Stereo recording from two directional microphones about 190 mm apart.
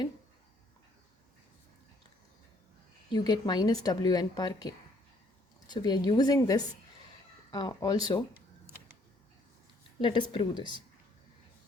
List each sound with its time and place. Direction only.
3.1 s speech: 20° left (ahead or behind)
10.0 s speech: 25° left (ahead or behind)